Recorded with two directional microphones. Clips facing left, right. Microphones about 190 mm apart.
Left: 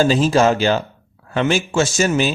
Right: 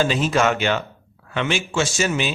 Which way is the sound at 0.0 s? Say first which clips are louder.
Left 5 dB; 35° left (ahead or behind).